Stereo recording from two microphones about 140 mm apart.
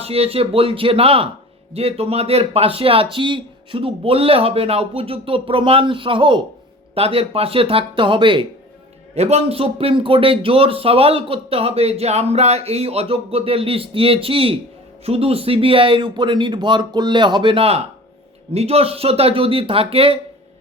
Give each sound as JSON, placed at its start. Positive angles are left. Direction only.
{"t": 0.0, "sound": "speech", "side_deg": -45}
{"t": 9.1, "sound": "speech", "side_deg": -50}